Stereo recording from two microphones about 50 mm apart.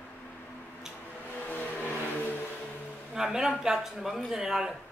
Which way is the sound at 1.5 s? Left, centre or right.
Left.